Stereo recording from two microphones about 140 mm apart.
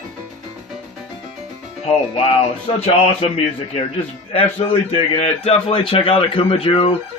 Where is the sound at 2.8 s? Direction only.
45° left (ahead or behind).